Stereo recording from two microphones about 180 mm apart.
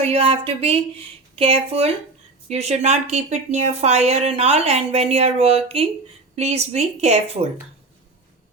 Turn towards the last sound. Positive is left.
turn(degrees=-35)  # may be behind; listen again after turning